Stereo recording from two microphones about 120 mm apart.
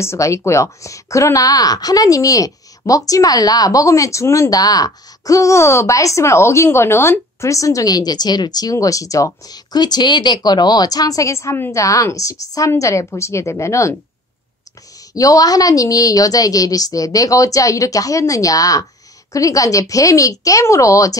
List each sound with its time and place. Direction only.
0.0 s speech: 25° left (ahead or behind)
15.1 s speech: 30° left (ahead or behind)